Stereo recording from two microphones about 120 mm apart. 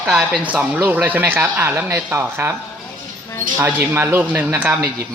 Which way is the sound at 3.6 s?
20° right (ahead or behind).